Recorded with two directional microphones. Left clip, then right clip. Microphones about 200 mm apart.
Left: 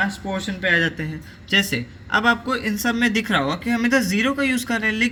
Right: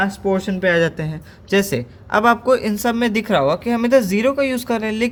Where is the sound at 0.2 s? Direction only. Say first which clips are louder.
Right 8 dB; 90° right.